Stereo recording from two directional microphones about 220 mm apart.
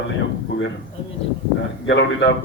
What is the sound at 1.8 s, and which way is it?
Speech, 55° left (ahead or behind).